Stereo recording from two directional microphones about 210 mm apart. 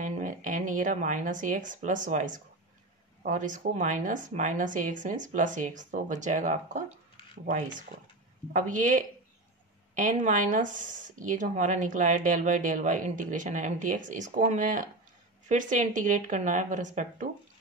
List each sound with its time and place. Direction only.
0.0 s speech: 40° right (ahead or behind)